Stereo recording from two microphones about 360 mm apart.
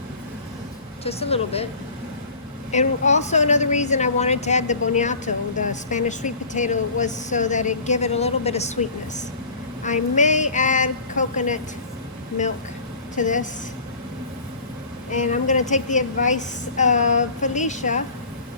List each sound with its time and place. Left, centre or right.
1.0 s speech: centre
2.7 s a woman's voice: centre
13.1 s a woman's voice: left
15.1 s a woman's voice: left